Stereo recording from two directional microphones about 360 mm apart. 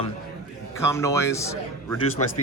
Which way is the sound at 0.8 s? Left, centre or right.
Centre.